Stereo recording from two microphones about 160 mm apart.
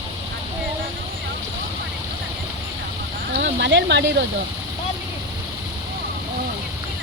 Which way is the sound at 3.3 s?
90° right.